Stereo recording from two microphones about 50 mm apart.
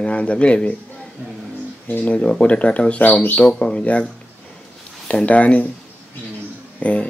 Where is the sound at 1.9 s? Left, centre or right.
Left.